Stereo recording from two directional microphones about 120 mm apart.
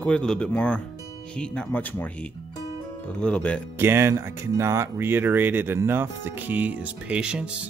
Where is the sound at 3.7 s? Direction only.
20° right (ahead or behind).